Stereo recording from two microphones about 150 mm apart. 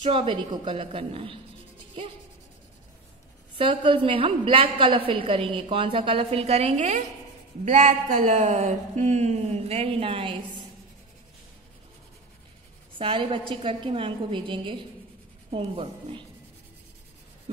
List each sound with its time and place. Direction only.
0.0 s a woman's voice: 35° right (ahead or behind)
3.5 s a woman's voice: 35° right (ahead or behind)
13.0 s a woman's voice: 35° right (ahead or behind)